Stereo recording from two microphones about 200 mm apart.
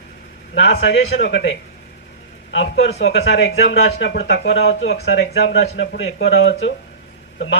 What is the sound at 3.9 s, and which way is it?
Speech, 60° left (ahead or behind).